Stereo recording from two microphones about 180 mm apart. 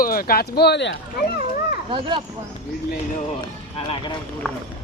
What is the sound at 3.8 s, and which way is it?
Speech, 25° left (ahead or behind).